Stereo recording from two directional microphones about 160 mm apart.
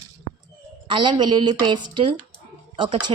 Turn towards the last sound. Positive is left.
turn(degrees=-30)  # may be behind; listen again after turning